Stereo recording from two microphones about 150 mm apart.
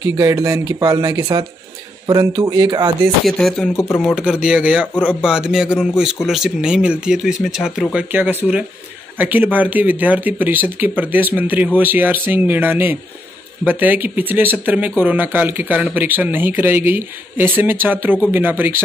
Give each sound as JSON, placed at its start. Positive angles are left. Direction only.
{"t": 0.0, "sound": "speech", "side_deg": -20}
{"t": 3.3, "sound": "a man's voice", "side_deg": 0}